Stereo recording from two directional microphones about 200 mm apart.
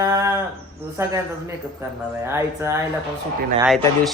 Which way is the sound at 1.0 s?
15° right (ahead or behind).